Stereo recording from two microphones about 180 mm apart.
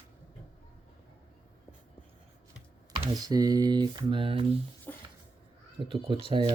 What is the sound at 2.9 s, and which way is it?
Speech, 20° right (ahead or behind).